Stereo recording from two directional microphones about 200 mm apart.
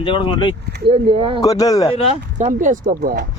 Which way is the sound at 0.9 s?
25° right (ahead or behind).